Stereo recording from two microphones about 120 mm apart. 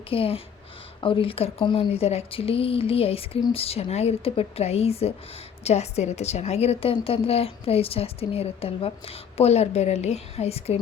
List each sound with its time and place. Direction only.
0.1 s a woman's voice: 50° left (ahead or behind)